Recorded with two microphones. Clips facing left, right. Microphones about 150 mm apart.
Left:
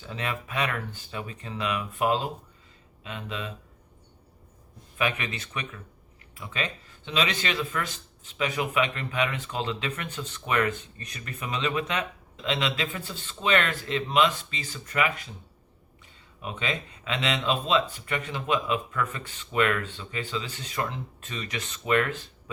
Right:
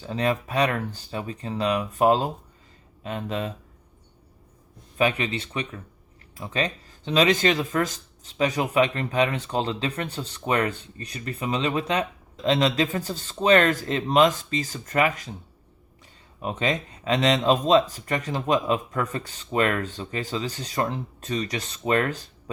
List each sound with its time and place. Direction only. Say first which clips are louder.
0.0 s speech: right 8 dB; 35° right (ahead or behind)
4.9 s speech: right 6 dB; 35° right (ahead or behind)
16.4 s speech: right 6 dB; 40° right (ahead or behind)